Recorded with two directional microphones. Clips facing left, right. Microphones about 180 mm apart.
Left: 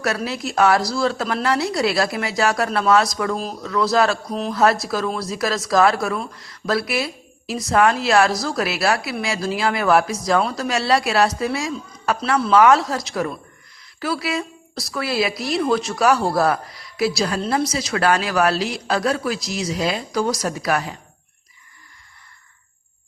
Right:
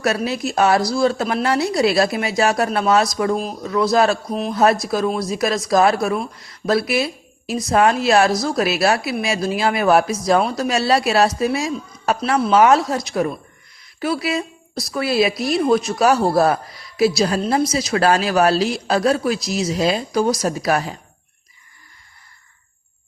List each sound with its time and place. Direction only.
0.3 s speech: 25° right (ahead or behind)
3.3 s speech: 15° right (ahead or behind)
4.3 s speech: 10° right (ahead or behind)
4.5 s speech: 20° right (ahead or behind)